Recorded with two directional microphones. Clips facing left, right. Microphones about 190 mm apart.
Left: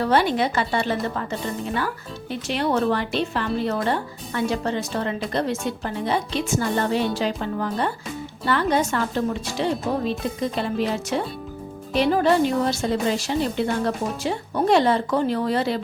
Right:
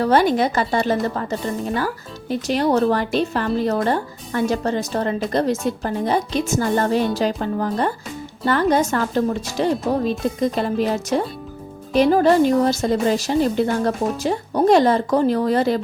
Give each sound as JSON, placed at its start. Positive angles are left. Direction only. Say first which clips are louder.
{"t": 0.0, "sound": "a woman's voice", "louder": "right 4 dB", "side_deg": -45}
{"t": 2.3, "sound": "a woman's voice", "louder": "right 5 dB", "side_deg": -40}